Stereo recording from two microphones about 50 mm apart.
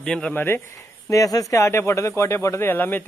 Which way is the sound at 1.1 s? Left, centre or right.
Left.